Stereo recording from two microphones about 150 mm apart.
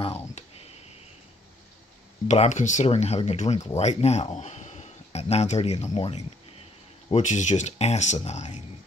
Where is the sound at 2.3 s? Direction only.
55° left (ahead or behind).